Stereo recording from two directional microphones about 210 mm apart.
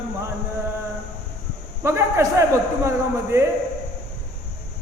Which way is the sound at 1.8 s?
10° right (ahead or behind).